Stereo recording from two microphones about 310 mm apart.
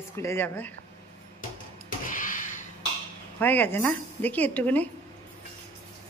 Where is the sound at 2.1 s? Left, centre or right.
Left.